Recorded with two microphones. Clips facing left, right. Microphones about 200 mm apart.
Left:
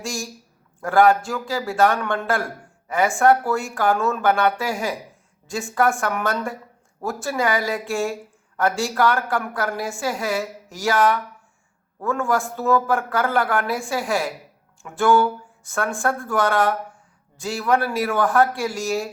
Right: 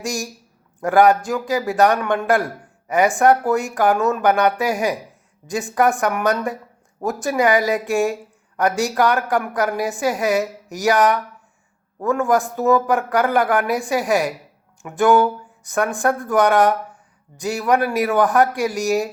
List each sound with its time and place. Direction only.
0.0 s a woman's voice: 20° right (ahead or behind)
12.2 s a woman's voice: 20° right (ahead or behind)